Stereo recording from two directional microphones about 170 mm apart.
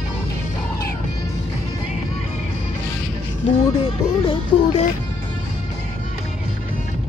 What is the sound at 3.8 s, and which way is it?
Music, 35° left (ahead or behind).